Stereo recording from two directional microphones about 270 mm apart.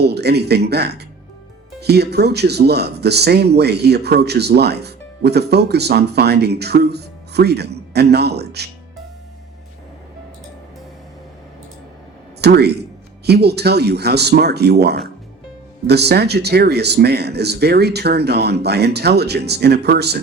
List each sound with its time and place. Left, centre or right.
0.0 s speech: right
12.4 s a man's voice: right